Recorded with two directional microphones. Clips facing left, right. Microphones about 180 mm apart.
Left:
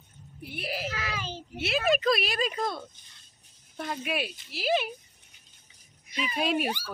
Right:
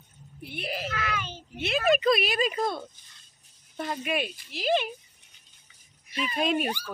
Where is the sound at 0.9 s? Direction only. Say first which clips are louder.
Right 2 dB; 30° left (ahead or behind).